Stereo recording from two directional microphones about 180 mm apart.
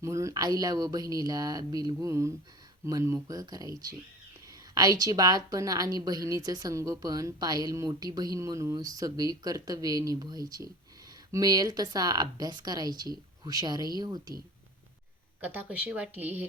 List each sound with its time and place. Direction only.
0.0 s a woman's voice: 15° right (ahead or behind)
15.4 s speech: 10° right (ahead or behind)